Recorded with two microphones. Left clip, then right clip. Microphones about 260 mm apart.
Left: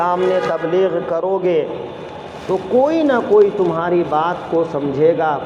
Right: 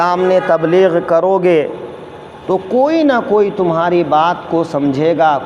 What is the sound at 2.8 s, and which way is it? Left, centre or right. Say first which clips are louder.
Speech: right 4 dB; right.